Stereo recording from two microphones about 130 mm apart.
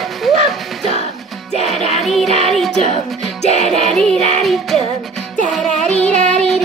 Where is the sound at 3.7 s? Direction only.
5° left (ahead or behind).